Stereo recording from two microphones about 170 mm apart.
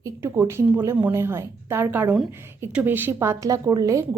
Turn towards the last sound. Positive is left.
turn(degrees=-20)  # may be behind; listen again after turning